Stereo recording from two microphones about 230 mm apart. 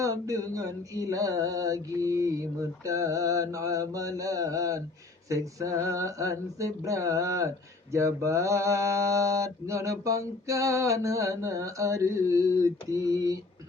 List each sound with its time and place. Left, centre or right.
0.0 s mantra: centre